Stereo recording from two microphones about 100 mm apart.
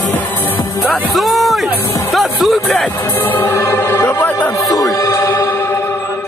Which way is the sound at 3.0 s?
20° left (ahead or behind).